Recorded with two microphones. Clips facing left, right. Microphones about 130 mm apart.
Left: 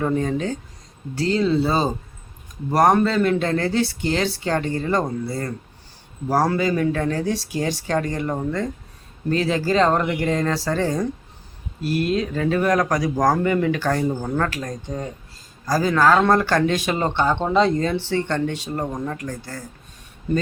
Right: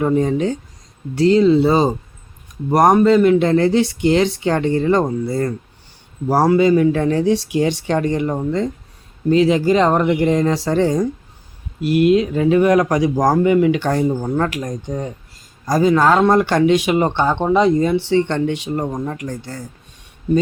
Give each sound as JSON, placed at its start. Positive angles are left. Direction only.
{"t": 0.0, "sound": "speech", "side_deg": -20}
{"t": 6.2, "sound": "speech", "side_deg": -20}